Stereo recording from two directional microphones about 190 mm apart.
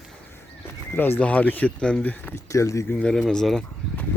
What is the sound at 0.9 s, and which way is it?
Speech, 10° left (ahead or behind).